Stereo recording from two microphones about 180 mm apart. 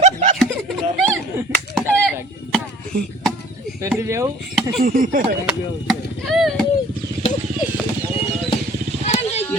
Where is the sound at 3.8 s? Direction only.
15° right (ahead or behind).